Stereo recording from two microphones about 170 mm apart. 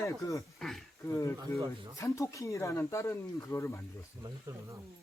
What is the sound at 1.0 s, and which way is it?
Speech, 15° left (ahead or behind).